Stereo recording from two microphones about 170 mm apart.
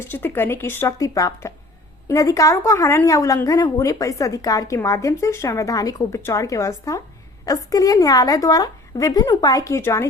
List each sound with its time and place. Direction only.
0.0 s a woman's voice: 15° left (ahead or behind)